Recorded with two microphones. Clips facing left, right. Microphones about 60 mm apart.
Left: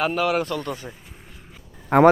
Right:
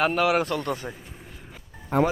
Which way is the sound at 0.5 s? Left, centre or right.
Right.